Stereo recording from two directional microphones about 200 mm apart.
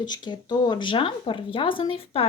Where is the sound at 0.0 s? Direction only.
20° left (ahead or behind).